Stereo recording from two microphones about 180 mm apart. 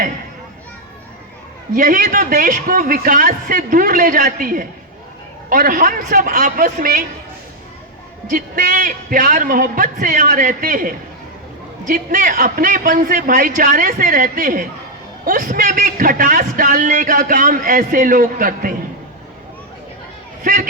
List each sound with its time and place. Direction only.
1.7 s a man's voice: 50° right (ahead or behind)
8.3 s a man's voice: 50° right (ahead or behind)
20.4 s speech: 50° right (ahead or behind)